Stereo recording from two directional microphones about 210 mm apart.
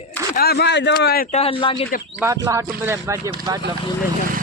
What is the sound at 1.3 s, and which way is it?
Speech, 30° left (ahead or behind).